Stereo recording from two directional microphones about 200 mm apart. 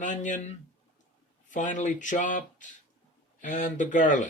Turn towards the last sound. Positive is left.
turn(degrees=40)  # may be behind; listen again after turning